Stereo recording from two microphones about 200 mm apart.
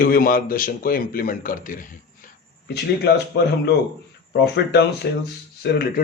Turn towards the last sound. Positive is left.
turn(degrees=60)  # may be behind; listen again after turning